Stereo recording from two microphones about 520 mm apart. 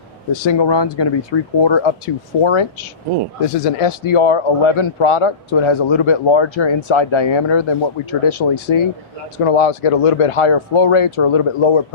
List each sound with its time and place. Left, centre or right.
0.3 s speech: left
3.5 s speech: left
9.4 s speech: left